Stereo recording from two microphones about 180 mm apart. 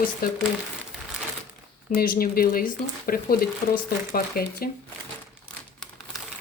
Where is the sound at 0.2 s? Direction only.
55° left (ahead or behind).